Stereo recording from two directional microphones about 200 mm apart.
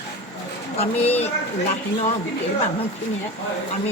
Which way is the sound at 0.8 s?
30° left (ahead or behind).